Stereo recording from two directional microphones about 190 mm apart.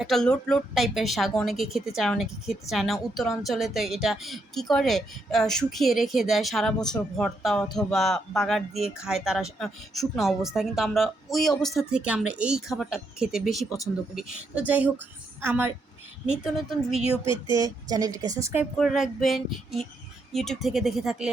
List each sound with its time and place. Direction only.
0.0 s a woman's voice: centre (ahead or behind)
17.0 s speech: 30° left (ahead or behind)
17.5 s a woman's voice: 20° right (ahead or behind)
18.8 s a woman's voice: centre (ahead or behind)